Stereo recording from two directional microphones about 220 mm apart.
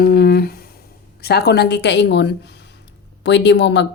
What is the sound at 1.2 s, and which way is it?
Speech, 45° left (ahead or behind).